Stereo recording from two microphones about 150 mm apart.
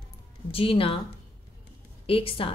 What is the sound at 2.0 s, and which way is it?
Speech, 35° left (ahead or behind).